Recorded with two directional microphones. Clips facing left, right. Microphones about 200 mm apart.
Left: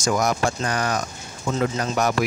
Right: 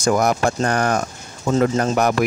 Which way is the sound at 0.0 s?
55° right (ahead or behind).